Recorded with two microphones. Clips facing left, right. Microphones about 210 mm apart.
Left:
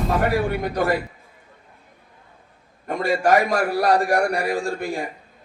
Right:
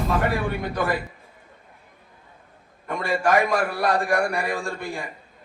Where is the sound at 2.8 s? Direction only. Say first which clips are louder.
Left 3 dB; 40° left (ahead or behind).